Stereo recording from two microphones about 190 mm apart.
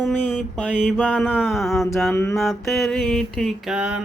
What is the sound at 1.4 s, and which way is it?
Mantra, centre (ahead or behind).